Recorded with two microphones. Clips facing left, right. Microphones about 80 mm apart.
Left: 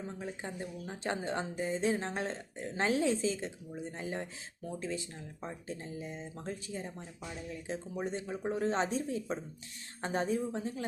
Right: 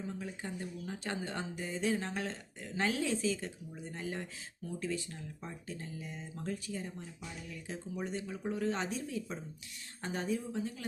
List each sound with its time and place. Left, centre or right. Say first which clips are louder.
0.1 s speech: left 1 dB; left